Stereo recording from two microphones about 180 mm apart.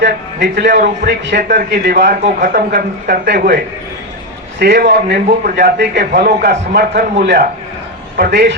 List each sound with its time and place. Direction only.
0.0 s a man's voice: 70° right (ahead or behind)
1.5 s a man's voice: 60° right (ahead or behind)
2.2 s a man's voice: 50° right (ahead or behind); by 3.6 s 65° right (ahead or behind)
4.6 s a man's voice: 70° right (ahead or behind)